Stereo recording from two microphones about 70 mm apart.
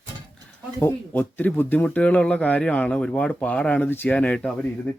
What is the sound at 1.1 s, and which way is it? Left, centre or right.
Speech, left.